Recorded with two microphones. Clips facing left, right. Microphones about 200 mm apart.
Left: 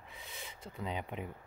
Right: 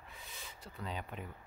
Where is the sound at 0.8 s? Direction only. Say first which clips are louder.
Left 4 dB; 20° left (ahead or behind).